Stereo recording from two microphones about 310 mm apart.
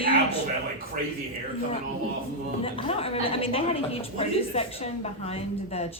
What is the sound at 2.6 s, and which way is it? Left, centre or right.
A woman's voice, centre.